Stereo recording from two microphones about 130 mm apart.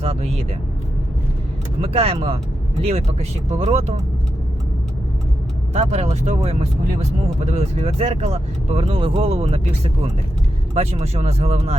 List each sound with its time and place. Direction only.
0.0 s speech: 50° right (ahead or behind)
1.8 s speech: 50° right (ahead or behind)
5.7 s speech: 60° right (ahead or behind)